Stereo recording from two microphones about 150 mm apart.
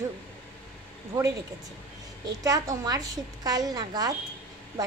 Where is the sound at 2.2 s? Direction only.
25° right (ahead or behind).